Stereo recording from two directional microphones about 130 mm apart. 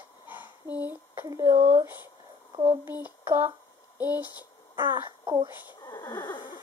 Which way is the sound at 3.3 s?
15° right (ahead or behind).